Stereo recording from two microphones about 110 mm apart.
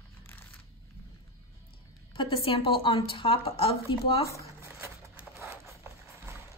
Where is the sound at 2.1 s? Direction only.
55° left (ahead or behind).